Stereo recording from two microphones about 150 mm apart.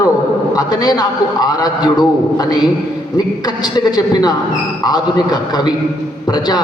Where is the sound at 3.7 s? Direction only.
25° left (ahead or behind).